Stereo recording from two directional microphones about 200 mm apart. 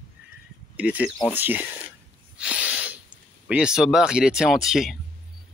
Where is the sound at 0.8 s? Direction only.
5° right (ahead or behind).